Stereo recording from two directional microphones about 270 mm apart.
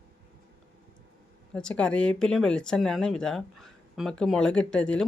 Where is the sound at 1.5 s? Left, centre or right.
Centre.